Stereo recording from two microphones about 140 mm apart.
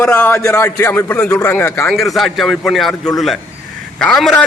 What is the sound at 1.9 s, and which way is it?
A man's voice, centre (ahead or behind).